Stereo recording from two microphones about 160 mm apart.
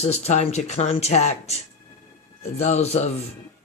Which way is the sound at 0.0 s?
45° left (ahead or behind).